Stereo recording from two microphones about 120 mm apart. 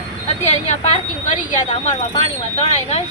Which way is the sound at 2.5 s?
65° left (ahead or behind).